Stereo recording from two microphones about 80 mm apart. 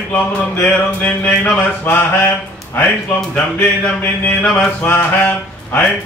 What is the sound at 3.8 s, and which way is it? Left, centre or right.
Mantra, centre.